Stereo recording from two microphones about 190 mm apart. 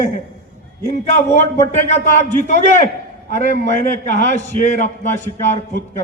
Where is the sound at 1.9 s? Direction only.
40° left (ahead or behind).